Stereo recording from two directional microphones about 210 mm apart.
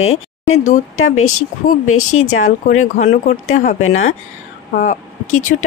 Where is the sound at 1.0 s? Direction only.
80° left.